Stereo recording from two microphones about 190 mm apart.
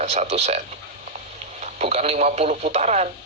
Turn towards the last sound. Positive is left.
turn(degrees=-35)  # may be behind; listen again after turning